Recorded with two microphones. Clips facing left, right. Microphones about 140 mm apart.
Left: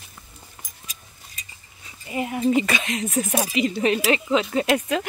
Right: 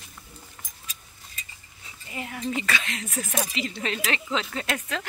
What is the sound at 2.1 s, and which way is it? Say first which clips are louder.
Speech: left 10 dB; 20° left (ahead or behind).